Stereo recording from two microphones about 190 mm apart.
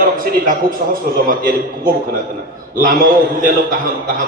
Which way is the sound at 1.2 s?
50° right (ahead or behind).